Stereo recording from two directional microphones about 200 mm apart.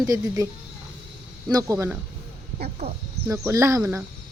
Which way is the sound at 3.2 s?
15° right (ahead or behind).